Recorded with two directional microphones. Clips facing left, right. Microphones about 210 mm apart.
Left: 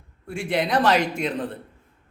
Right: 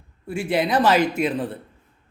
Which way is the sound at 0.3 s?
5° right (ahead or behind).